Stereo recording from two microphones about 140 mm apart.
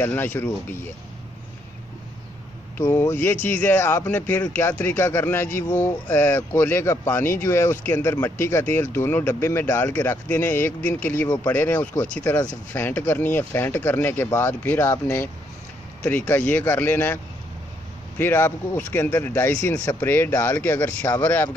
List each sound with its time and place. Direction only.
0.0 s speech: 15° left (ahead or behind)
2.8 s speech: 20° left (ahead or behind)